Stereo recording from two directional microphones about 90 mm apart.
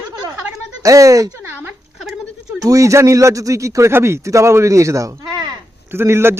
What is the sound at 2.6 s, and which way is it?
Speech, 40° right (ahead or behind).